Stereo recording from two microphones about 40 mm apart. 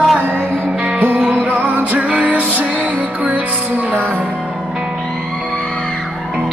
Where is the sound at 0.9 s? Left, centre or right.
Right.